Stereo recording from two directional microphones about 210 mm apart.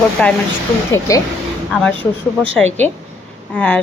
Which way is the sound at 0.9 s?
15° left (ahead or behind).